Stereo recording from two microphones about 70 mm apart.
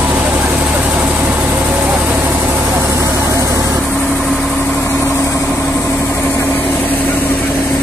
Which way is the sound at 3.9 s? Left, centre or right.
Centre.